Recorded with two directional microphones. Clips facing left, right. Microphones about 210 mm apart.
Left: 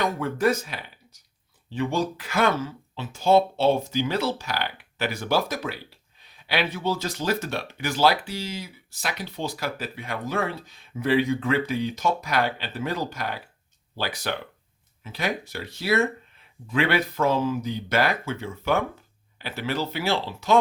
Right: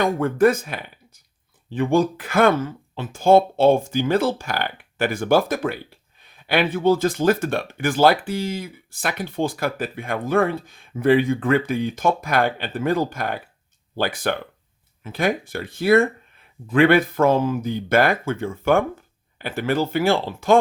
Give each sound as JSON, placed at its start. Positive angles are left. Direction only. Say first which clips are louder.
{"t": 0.0, "sound": "speech", "louder": "right 6 dB", "side_deg": -50}